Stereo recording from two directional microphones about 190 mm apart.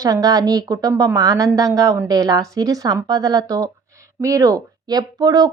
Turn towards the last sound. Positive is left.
turn(degrees=-20)  # may be behind; listen again after turning